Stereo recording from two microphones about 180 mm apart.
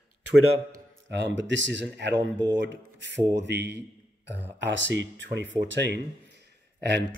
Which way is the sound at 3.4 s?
70° right (ahead or behind).